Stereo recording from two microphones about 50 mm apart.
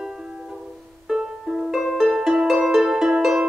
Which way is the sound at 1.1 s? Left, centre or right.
Centre.